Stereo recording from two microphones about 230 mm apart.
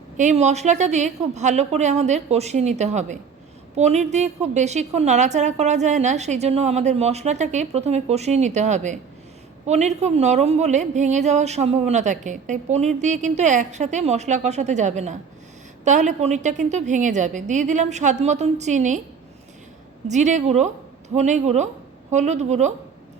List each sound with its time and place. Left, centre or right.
0.2 s a woman's voice: right
20.1 s a woman's voice: right